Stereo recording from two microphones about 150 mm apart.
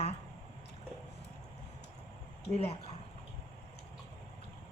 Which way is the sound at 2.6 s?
40° left (ahead or behind).